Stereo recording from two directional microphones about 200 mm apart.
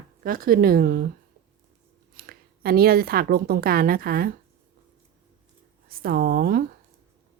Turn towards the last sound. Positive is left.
turn(degrees=-50)  # may be behind; listen again after turning